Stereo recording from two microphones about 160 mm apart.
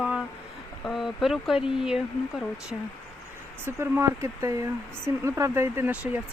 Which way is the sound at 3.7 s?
15° right (ahead or behind).